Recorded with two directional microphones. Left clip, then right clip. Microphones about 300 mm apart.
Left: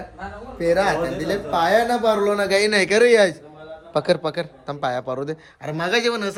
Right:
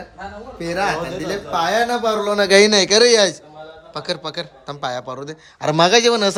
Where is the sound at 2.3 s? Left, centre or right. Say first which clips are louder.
Right 6 dB; right.